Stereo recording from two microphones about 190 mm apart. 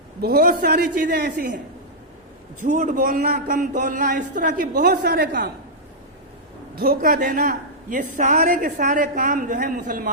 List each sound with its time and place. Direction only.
0.2 s a man's voice: 50° right (ahead or behind)
2.6 s a man's voice: 40° right (ahead or behind)
4.7 s a woman's voice: 60° right (ahead or behind)
6.7 s a man's voice: 55° right (ahead or behind)